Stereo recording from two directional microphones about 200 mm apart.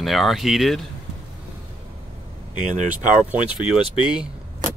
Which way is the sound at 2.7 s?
40° right (ahead or behind).